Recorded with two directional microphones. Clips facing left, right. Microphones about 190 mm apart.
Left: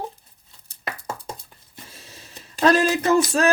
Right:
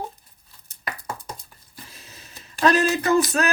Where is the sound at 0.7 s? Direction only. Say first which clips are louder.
Left 1 dB; 25° left (ahead or behind).